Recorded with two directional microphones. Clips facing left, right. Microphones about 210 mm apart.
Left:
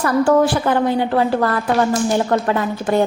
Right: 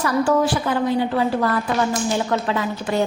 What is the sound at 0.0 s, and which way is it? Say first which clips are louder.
A woman's voice: left 4 dB; 55° left (ahead or behind).